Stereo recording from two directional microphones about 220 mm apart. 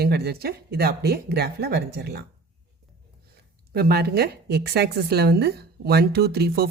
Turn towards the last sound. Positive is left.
turn(degrees=-45)  # may be behind; listen again after turning